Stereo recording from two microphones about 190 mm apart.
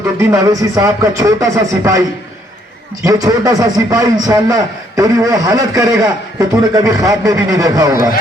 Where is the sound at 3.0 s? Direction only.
20° right (ahead or behind).